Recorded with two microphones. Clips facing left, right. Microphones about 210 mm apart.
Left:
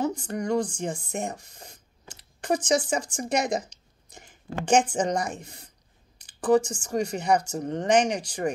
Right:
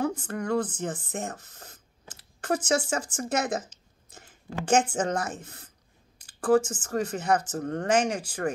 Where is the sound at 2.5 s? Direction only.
5° right (ahead or behind).